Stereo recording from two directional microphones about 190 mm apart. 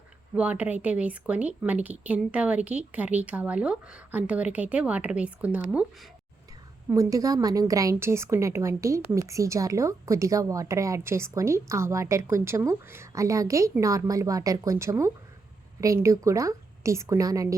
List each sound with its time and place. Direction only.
0.3 s a woman's voice: 5° right (ahead or behind)